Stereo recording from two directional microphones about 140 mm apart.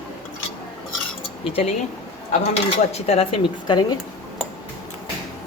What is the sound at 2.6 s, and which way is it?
Dishes, 45° left (ahead or behind).